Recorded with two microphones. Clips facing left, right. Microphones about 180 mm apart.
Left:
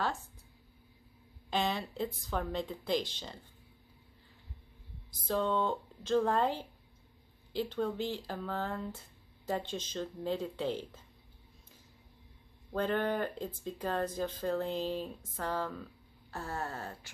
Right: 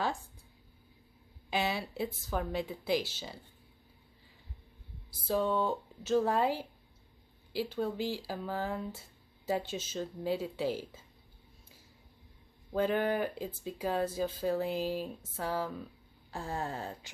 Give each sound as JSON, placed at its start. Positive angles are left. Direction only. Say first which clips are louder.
{"t": 0.0, "sound": "speech", "louder": "right 1 dB", "side_deg": -10}
{"t": 1.5, "sound": "speech", "louder": "even", "side_deg": -10}
{"t": 5.1, "sound": "speech", "louder": "right 1 dB", "side_deg": -10}
{"t": 12.7, "sound": "speech", "louder": "right 2 dB", "side_deg": -10}